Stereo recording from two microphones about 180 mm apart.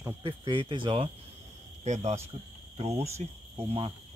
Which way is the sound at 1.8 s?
40° right (ahead or behind).